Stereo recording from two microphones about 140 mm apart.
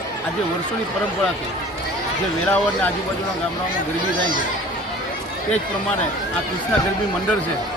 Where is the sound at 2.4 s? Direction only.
10° left (ahead or behind).